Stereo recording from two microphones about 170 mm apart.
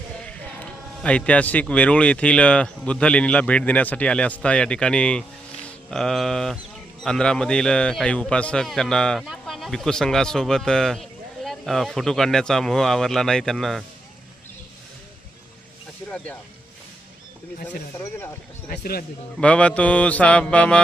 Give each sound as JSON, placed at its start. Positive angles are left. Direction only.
{"t": 0.3, "sound": "a man's voice", "side_deg": 5}
{"t": 16.0, "sound": "speech", "side_deg": 10}
{"t": 17.9, "sound": "a man's voice", "side_deg": 15}
{"t": 18.7, "sound": "speech", "side_deg": 65}
{"t": 19.4, "sound": "a man's voice", "side_deg": 5}